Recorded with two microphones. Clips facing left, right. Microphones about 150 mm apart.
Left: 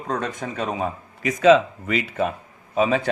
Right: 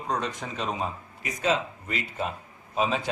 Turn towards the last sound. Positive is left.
turn(degrees=55)  # may be behind; listen again after turning